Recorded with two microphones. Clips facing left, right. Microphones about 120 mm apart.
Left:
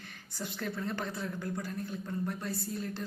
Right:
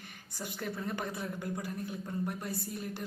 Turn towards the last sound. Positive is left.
turn(degrees=-15)  # may be behind; listen again after turning